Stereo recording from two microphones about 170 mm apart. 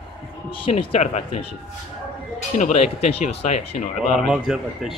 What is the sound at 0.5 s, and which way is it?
Speech, 35° left (ahead or behind).